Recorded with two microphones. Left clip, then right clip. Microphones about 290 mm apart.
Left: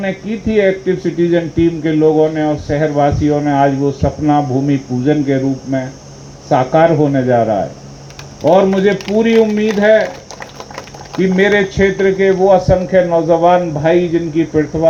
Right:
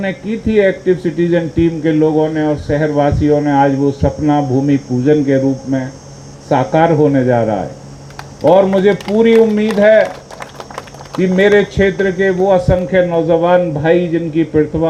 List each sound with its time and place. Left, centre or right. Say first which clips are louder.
0.0 s speech: even; right
11.2 s speech: right 1 dB; right